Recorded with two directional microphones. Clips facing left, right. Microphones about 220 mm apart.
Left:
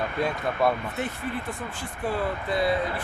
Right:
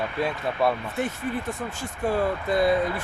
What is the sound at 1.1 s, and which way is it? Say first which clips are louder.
Speech: right 3 dB; 45° right (ahead or behind).